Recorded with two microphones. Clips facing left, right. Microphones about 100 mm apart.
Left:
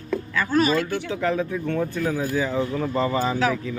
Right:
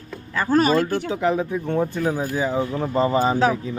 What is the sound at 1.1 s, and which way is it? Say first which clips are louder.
Speech: right 1 dB; 20° right (ahead or behind).